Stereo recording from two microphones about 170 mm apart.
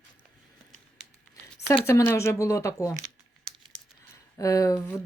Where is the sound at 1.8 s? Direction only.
15° left (ahead or behind).